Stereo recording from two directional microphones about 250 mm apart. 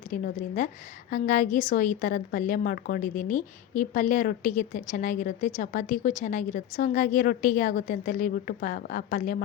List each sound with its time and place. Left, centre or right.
0.1 s a woman's voice: left